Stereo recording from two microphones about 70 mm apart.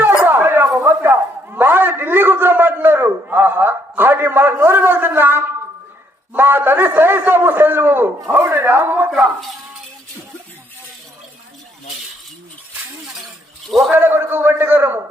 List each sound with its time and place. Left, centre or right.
0.3 s a sound: right
6.3 s a man's voice: right
13.7 s a man's voice: centre
13.9 s a man's voice: right